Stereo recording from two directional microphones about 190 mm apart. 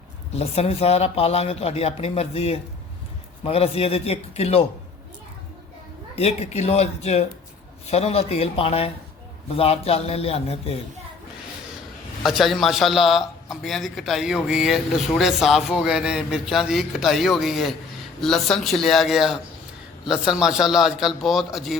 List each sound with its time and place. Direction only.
0.3 s speech: 30° left (ahead or behind)
6.1 s speech: 35° left (ahead or behind)
12.2 s a man's voice: centre (ahead or behind)